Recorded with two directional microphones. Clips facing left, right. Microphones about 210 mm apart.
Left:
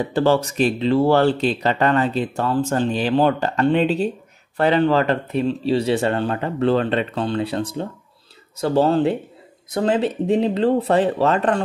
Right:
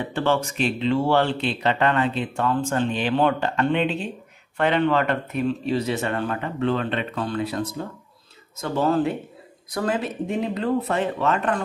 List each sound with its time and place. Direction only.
0.0 s speech: 35° left (ahead or behind)